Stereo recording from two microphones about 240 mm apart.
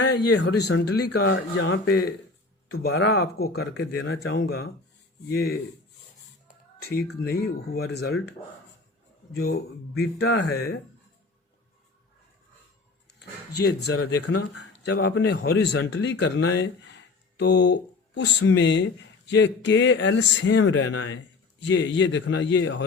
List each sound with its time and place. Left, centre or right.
0.0 s a man's voice: left
6.5 s a sound: left
7.2 s speech: left
9.3 s speech: left
13.6 s a man's voice: left